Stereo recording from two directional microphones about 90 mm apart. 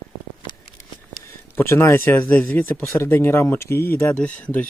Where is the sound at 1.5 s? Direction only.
25° left (ahead or behind).